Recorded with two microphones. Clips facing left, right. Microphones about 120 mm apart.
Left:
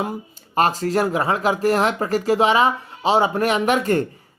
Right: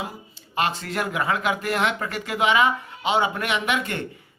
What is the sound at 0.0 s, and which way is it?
Speech, 45° left (ahead or behind).